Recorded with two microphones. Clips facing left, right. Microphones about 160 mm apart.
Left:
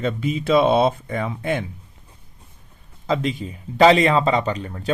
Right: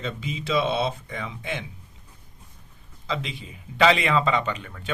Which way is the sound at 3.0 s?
45° left (ahead or behind).